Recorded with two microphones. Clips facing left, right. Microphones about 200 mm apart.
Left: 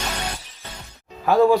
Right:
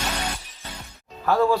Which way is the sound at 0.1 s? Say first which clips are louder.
Even; 10° left (ahead or behind).